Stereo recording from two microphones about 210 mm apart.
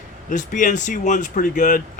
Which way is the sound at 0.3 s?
35° left (ahead or behind).